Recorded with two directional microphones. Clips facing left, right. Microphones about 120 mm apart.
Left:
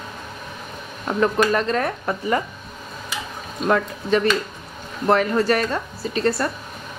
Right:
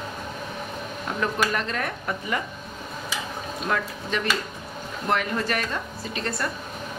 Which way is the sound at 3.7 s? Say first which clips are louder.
Left 9 dB; 35° left (ahead or behind).